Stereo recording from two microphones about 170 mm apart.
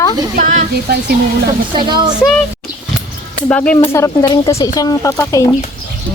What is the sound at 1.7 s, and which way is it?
Speech, 25° right (ahead or behind).